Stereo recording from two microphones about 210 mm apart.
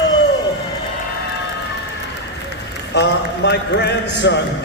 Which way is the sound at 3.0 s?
55° left (ahead or behind).